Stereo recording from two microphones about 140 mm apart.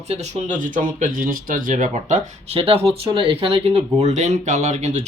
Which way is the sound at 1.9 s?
50° right (ahead or behind).